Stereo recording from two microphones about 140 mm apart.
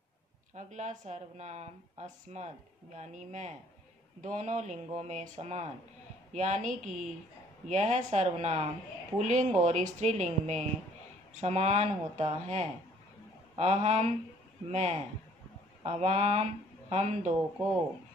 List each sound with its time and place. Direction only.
0.6 s speech: 60° right (ahead or behind)